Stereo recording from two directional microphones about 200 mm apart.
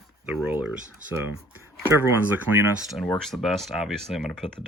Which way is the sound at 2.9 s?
Centre (ahead or behind).